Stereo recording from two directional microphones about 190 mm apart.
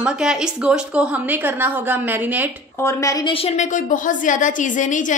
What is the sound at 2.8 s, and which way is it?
A woman's voice, 15° left (ahead or behind).